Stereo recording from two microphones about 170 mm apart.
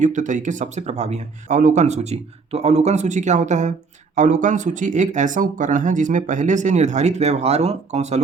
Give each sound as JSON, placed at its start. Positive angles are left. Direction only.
{"t": 0.0, "sound": "speech", "side_deg": -45}